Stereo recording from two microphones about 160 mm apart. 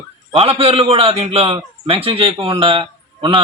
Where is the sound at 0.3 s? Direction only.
35° right (ahead or behind).